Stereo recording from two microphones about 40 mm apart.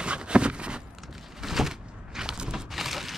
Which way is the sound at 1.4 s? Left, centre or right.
Centre.